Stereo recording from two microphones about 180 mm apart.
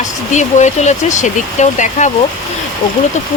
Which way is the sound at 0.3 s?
40° left (ahead or behind).